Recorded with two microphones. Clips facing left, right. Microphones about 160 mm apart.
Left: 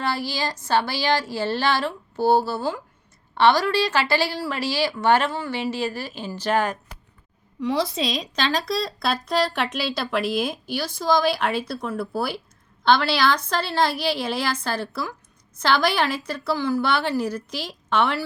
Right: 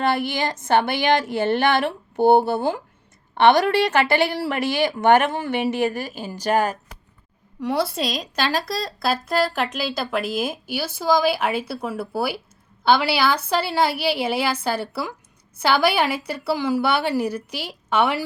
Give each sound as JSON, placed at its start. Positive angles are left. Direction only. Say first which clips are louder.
{"t": 0.3, "sound": "speech", "louder": "right 3 dB", "side_deg": -20}
{"t": 0.7, "sound": "speech", "louder": "right 3 dB", "side_deg": -55}
{"t": 1.0, "sound": "speech", "louder": "right 4 dB", "side_deg": -20}
{"t": 1.6, "sound": "speech", "louder": "right 2 dB", "side_deg": -55}
{"t": 2.1, "sound": "speech", "louder": "right 4 dB", "side_deg": -20}
{"t": 4.1, "sound": "speech", "louder": "right 3 dB", "side_deg": -55}
{"t": 5.1, "sound": "speech", "louder": "right 4 dB", "side_deg": -20}
{"t": 5.7, "sound": "a woman's voice", "louder": "right 4 dB", "side_deg": -50}
{"t": 6.1, "sound": "a woman's voice", "louder": "right 2 dB", "side_deg": -10}
{"t": 7.7, "sound": "a woman's voice", "louder": "right 1 dB", "side_deg": -5}